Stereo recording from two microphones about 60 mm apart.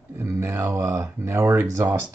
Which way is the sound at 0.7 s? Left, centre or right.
Right.